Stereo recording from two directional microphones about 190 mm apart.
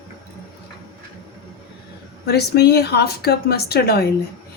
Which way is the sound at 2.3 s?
60° left (ahead or behind).